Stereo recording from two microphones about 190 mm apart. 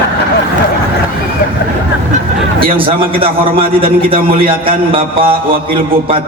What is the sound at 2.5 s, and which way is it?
A man's voice, 30° right (ahead or behind).